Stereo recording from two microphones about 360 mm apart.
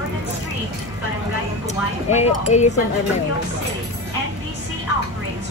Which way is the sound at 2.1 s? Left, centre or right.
Centre.